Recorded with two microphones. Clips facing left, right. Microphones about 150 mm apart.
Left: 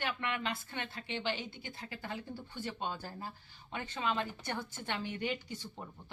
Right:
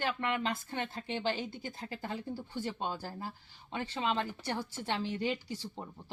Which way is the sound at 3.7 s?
30° right (ahead or behind).